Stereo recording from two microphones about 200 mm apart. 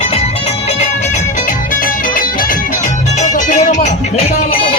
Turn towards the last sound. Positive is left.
turn(degrees=30)  # may be behind; listen again after turning